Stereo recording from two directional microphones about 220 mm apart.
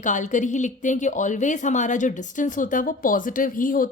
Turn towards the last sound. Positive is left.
turn(degrees=40)  # may be behind; listen again after turning